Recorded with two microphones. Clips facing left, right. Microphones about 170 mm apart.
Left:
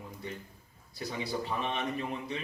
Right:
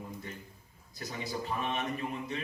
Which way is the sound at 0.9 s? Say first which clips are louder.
Left 3 dB; 45° right (ahead or behind).